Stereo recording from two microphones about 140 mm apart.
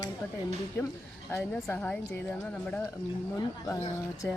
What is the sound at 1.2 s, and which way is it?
Speech, 15° left (ahead or behind).